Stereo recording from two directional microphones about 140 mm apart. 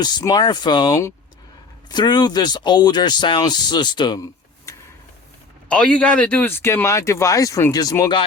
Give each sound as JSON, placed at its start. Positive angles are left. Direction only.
{"t": 0.0, "sound": "speech", "side_deg": 30}
{"t": 5.6, "sound": "speech", "side_deg": 10}